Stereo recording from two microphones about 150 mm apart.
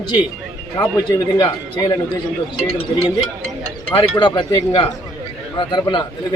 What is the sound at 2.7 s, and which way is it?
Speech, 40° left (ahead or behind).